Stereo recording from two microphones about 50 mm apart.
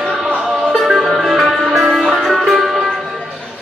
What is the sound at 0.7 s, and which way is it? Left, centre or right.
Music, centre.